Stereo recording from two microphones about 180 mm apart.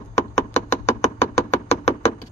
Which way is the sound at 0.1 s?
40° left (ahead or behind).